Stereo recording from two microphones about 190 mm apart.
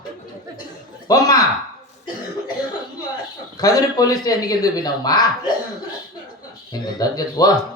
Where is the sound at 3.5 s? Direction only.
20° left (ahead or behind).